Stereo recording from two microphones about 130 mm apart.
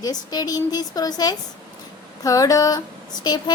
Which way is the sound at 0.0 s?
30° left (ahead or behind).